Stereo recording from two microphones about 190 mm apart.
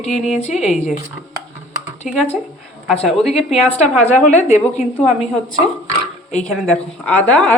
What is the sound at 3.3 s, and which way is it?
A woman's voice, 30° left (ahead or behind).